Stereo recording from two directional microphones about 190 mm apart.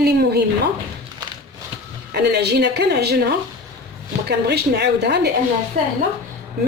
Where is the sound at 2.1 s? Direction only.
60° right (ahead or behind).